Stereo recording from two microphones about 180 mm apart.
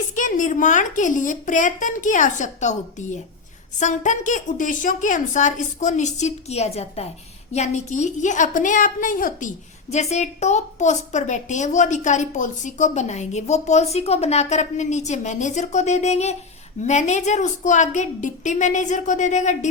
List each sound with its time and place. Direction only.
0.2 s a woman's voice: 45° left (ahead or behind)